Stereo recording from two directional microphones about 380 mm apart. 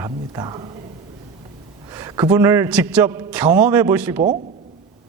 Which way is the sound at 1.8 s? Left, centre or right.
Centre.